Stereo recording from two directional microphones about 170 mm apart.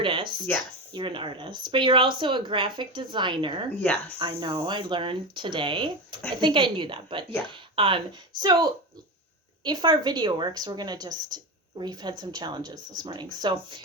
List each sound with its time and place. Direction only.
0.0 s a sound: 30° right (ahead or behind)
0.9 s speech: 30° right (ahead or behind)
9.6 s speech: 25° right (ahead or behind)